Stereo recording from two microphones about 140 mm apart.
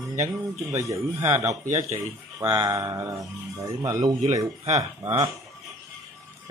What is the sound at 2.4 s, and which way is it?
Speech, 25° right (ahead or behind).